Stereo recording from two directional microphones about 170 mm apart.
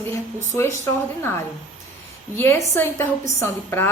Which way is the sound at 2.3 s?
15° left (ahead or behind).